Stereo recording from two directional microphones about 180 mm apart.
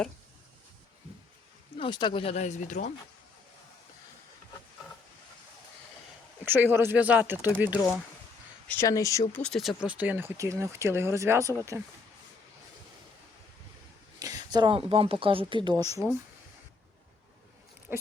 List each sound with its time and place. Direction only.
1.8 s speech: 25° left (ahead or behind); by 2.9 s 45° left (ahead or behind)
6.4 s speech: 10° right (ahead or behind)
8.6 s speech: 15° left (ahead or behind)
9.3 s speech: 5° left (ahead or behind); by 11.8 s 15° right (ahead or behind)
14.2 s speech: 20° right (ahead or behind)
17.9 s speech: 10° right (ahead or behind)